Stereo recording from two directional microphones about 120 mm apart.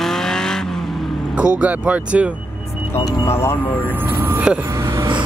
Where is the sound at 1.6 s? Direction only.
10° right (ahead or behind).